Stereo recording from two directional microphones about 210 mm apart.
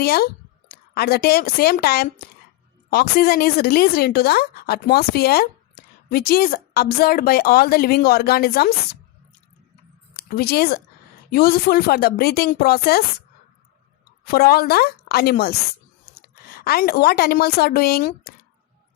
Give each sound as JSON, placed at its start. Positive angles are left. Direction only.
{"t": 0.0, "sound": "a woman's voice", "side_deg": 50}
{"t": 10.2, "sound": "a woman's voice", "side_deg": 45}
{"t": 14.3, "sound": "a woman's voice", "side_deg": 45}